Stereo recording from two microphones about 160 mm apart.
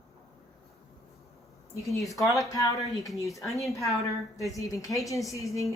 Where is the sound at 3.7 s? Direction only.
20° left (ahead or behind).